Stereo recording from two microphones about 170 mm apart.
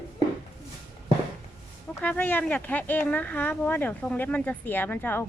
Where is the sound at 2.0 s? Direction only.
10° left (ahead or behind).